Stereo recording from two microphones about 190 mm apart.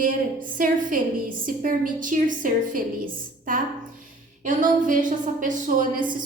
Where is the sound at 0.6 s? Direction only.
45° right (ahead or behind).